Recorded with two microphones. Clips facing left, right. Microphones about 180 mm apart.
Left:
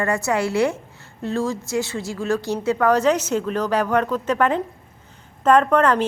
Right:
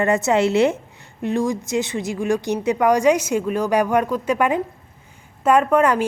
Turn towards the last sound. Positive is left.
turn(degrees=-10)  # may be behind; listen again after turning